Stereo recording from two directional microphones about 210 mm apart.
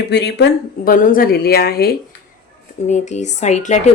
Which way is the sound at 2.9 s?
35° left (ahead or behind).